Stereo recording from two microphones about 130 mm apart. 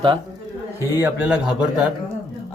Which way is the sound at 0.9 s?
15° right (ahead or behind).